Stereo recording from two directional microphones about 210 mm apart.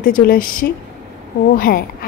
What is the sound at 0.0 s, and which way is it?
A woman's voice, 40° left (ahead or behind).